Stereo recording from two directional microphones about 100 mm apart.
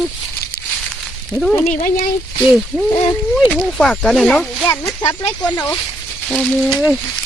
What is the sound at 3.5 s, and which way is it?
Speech, 5° left (ahead or behind).